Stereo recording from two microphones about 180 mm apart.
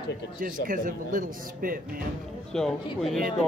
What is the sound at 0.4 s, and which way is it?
Speech, 50° right (ahead or behind).